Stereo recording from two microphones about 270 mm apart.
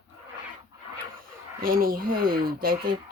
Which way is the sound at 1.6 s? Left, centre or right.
Right.